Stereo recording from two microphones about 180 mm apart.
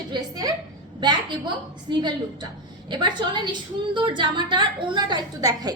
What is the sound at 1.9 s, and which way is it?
A woman's voice, 25° right (ahead or behind).